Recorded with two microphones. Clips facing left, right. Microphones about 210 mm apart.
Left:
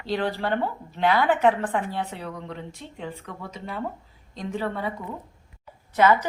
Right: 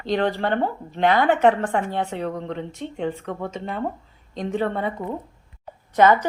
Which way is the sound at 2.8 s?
65° right (ahead or behind).